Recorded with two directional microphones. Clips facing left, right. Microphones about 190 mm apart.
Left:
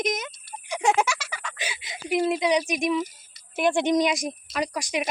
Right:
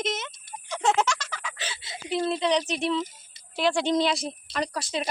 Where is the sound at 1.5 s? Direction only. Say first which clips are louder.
Left 2 dB; 15° left (ahead or behind).